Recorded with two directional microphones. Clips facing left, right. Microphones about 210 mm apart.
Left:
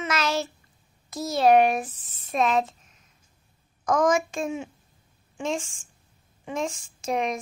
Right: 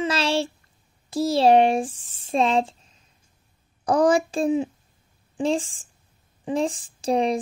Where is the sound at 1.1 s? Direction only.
30° right (ahead or behind).